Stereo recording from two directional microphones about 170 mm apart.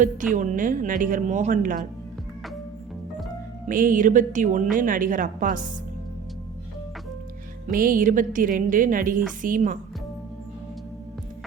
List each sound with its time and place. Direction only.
0.3 s a woman's voice: 50° right (ahead or behind)
3.7 s a woman's voice: 55° right (ahead or behind)
7.7 s a woman's voice: 55° right (ahead or behind)